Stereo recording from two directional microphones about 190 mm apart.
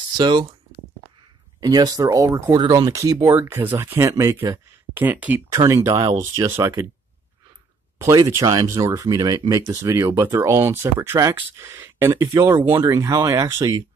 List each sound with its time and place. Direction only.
0.2 s speech: 25° right (ahead or behind)
1.6 s speech: 20° right (ahead or behind)
8.0 s speech: 15° right (ahead or behind)